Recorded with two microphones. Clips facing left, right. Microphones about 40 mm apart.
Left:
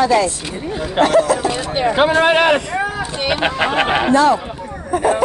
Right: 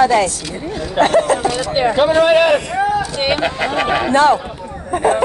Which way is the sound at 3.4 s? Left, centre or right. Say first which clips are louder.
Left 1 dB; left.